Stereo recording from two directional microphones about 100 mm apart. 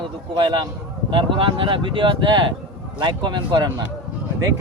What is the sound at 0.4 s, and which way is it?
Speech, 55° right (ahead or behind).